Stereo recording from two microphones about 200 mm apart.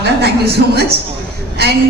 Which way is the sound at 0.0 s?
55° right (ahead or behind).